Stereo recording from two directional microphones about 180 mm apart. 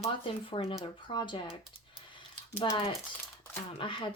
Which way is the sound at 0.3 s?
30° left (ahead or behind).